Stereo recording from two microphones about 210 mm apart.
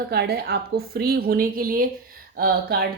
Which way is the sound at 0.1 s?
50° right (ahead or behind).